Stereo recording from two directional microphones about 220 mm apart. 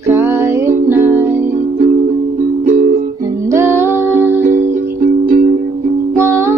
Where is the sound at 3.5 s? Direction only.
10° right (ahead or behind).